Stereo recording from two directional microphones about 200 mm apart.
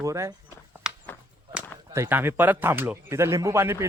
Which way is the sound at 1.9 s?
10° right (ahead or behind).